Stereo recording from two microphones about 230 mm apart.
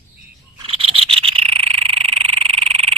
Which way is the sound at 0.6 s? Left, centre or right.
Right.